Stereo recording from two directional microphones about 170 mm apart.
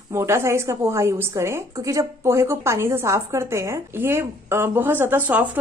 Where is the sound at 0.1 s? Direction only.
15° right (ahead or behind).